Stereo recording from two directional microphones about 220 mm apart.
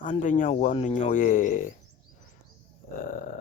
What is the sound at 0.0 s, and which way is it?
Speech, 35° left (ahead or behind).